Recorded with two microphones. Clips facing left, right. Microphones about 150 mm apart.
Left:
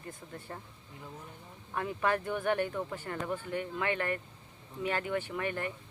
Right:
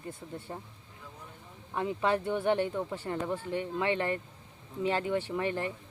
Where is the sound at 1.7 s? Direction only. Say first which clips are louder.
Right 2 dB; 20° right (ahead or behind).